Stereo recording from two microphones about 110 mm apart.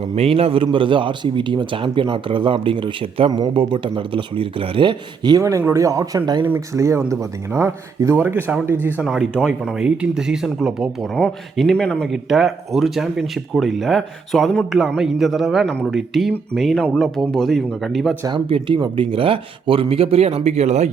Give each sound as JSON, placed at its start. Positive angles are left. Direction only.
{"t": 0.2, "sound": "a man's voice", "side_deg": -60}
{"t": 5.4, "sound": "speech", "side_deg": -30}
{"t": 6.4, "sound": "speech", "side_deg": -20}
{"t": 9.0, "sound": "speech", "side_deg": -5}
{"t": 18.3, "sound": "speech", "side_deg": -55}